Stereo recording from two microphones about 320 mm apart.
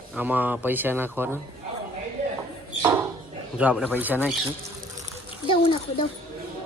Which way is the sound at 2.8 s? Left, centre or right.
Centre.